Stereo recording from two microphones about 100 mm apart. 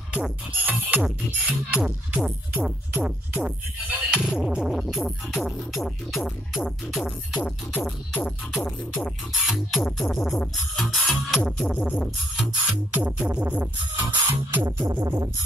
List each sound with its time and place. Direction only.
0.1 s music: 15° right (ahead or behind); by 12.4 s 5° left (ahead or behind)
12.9 s music: 15° right (ahead or behind)